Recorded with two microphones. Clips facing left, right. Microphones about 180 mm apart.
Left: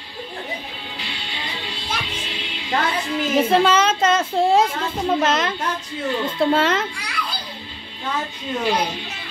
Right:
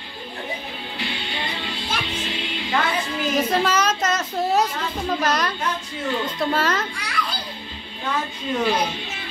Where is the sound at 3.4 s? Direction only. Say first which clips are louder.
Left 5 dB; 30° left (ahead or behind).